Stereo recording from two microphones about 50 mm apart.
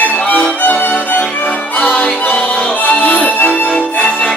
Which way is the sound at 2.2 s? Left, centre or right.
Left.